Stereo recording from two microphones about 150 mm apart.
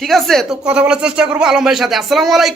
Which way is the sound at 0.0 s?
Centre (ahead or behind).